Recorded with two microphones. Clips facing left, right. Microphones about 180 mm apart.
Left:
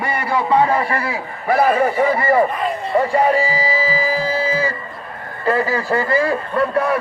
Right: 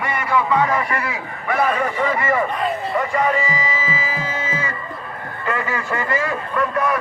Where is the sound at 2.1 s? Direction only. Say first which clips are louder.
Left 5 dB; 35° left (ahead or behind).